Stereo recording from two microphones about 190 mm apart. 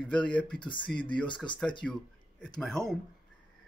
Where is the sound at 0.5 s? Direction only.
25° left (ahead or behind).